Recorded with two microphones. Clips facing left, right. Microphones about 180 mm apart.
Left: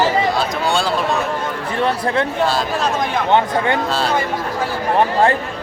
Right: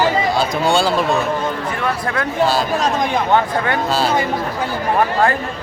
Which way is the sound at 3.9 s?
Centre (ahead or behind).